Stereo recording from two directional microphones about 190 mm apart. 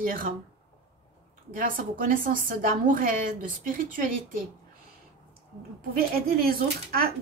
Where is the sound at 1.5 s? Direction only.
45° right (ahead or behind).